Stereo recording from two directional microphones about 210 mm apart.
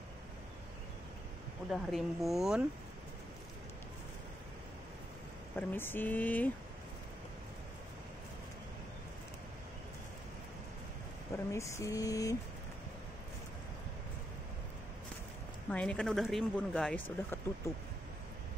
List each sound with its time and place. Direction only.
1.7 s speech: centre (ahead or behind)
5.6 s speech: 10° left (ahead or behind)
11.3 s speech: 15° left (ahead or behind)
15.7 s speech: 5° left (ahead or behind)